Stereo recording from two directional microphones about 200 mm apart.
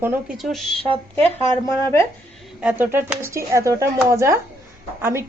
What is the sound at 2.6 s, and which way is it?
Speech, 10° right (ahead or behind).